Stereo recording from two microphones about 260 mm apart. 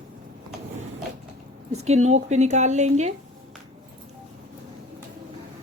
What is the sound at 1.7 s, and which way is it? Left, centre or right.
A woman's voice, right.